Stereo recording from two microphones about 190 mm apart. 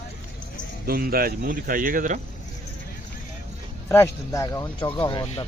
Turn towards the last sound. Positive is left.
turn(degrees=30)  # may be behind; listen again after turning